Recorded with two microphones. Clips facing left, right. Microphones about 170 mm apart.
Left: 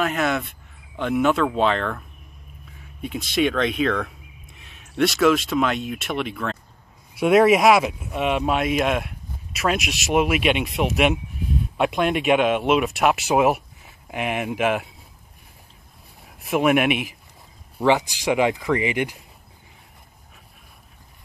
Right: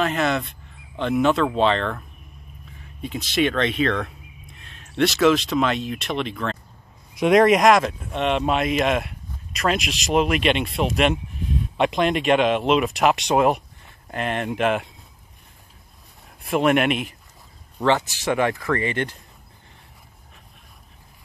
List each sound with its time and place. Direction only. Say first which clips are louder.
0.0 s speech: right 1 dB; 5° left (ahead or behind)
16.3 s speech: even; 5° left (ahead or behind)